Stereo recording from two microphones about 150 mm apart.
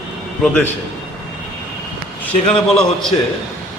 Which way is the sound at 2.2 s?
5° left (ahead or behind).